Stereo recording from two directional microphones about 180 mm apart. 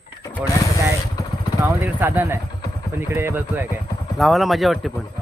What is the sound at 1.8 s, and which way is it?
Speech, 10° right (ahead or behind).